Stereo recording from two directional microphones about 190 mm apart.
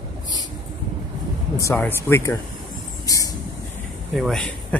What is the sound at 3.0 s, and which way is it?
Vehicle, 20° left (ahead or behind).